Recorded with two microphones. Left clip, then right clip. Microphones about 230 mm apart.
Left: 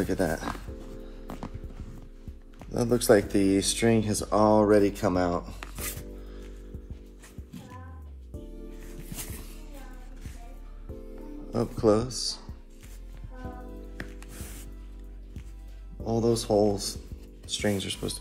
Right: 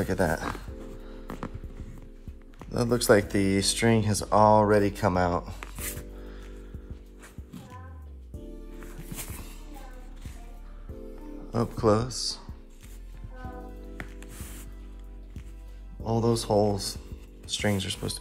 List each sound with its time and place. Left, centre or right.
0.0 s music: right
0.5 s music: centre
2.8 s speech: right
8.3 s music: centre
11.5 s a man's voice: right
16.0 s speech: right